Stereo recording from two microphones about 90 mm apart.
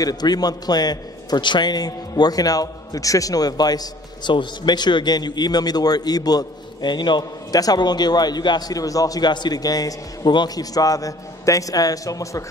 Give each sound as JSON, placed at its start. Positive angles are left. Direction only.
{"t": 0.0, "sound": "a man's voice", "side_deg": 45}